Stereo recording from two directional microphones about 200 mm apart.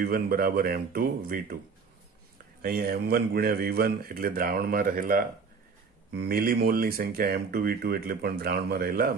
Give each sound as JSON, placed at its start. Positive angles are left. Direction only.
{"t": 0.0, "sound": "speech", "side_deg": -45}
{"t": 2.6, "sound": "speech", "side_deg": -50}